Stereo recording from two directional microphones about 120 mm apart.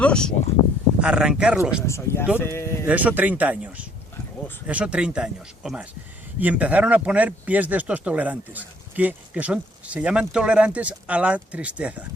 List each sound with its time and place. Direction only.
0.0 s speech: 5° left (ahead or behind)
1.0 s a man's voice: 5° right (ahead or behind)
1.9 s speech: 20° left (ahead or behind)
2.8 s a man's voice: 10° right (ahead or behind)